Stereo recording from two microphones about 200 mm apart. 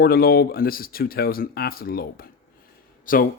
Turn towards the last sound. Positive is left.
turn(degrees=45)  # may be behind; listen again after turning